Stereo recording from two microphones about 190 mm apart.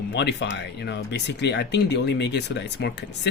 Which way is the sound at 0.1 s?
65° left (ahead or behind).